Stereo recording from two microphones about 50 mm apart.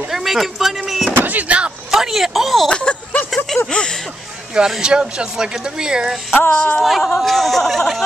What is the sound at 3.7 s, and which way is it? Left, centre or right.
Speech, centre.